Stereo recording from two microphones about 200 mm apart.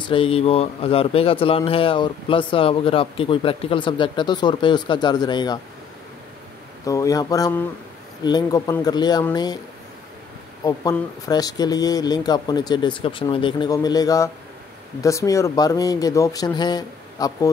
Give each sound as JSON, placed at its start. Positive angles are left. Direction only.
{"t": 0.1, "sound": "speech", "side_deg": 25}
{"t": 6.9, "sound": "speech", "side_deg": 15}
{"t": 10.6, "sound": "speech", "side_deg": 20}